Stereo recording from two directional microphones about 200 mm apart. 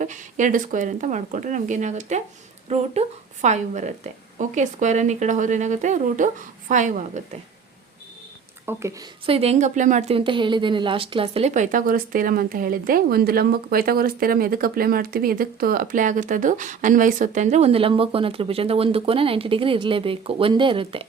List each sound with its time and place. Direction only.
0.0 s a woman's voice: 40° right (ahead or behind)
8.6 s speech: 15° right (ahead or behind)
9.2 s a woman's voice: 30° right (ahead or behind)